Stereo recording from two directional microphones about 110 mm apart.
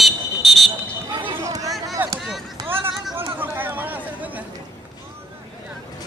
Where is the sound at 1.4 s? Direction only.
30° right (ahead or behind).